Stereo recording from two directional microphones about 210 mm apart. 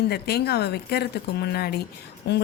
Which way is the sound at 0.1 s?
50° left (ahead or behind).